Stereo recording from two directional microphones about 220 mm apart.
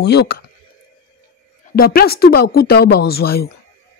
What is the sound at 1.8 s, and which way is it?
Speech, 40° left (ahead or behind).